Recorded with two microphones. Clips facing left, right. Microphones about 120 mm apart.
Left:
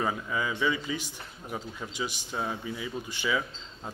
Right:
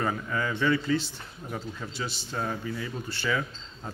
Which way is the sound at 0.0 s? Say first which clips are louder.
Right 1 dB; 10° left (ahead or behind).